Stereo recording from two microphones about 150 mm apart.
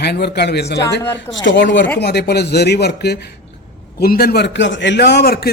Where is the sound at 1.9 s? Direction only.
90° left.